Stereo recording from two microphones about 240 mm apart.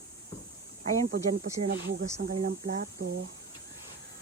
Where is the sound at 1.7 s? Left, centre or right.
Right.